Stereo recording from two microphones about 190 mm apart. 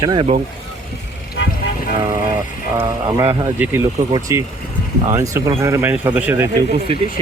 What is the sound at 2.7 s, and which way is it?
Speech, 10° right (ahead or behind).